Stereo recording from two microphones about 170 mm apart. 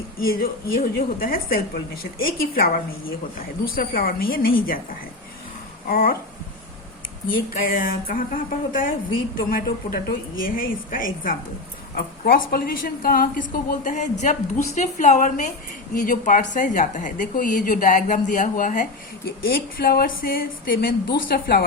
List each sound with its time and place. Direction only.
0.3 s a woman's voice: 60° left (ahead or behind)
5.9 s a woman's voice: 60° left (ahead or behind)
7.3 s a woman's voice: 55° left (ahead or behind)
11.9 s a woman's voice: 65° left (ahead or behind)